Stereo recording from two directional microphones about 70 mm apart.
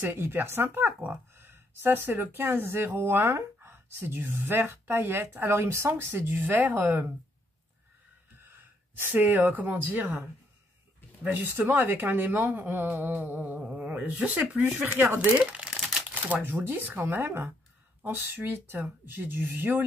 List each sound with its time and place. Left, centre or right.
0.0 s speech: right
8.5 s speech: right
11.2 s speech: right
15.3 s speech: centre
15.7 s crumpling: centre
16.1 s shuffling cards: right
16.4 s speech: right